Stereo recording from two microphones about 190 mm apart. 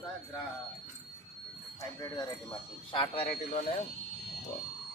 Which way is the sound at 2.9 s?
30° left (ahead or behind).